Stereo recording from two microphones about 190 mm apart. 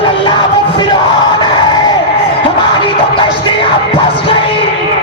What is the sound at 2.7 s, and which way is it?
Music, 25° left (ahead or behind).